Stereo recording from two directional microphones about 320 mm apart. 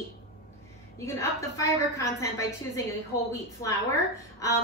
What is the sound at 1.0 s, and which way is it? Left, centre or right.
A woman's voice, centre.